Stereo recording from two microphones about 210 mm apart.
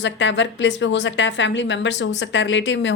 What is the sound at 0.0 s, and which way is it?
A woman's voice, 60° left (ahead or behind).